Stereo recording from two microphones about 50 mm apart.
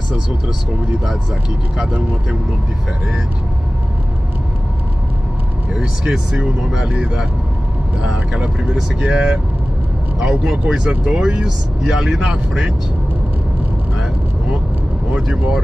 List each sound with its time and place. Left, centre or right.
5.8 s speech: centre
11.4 s speech: centre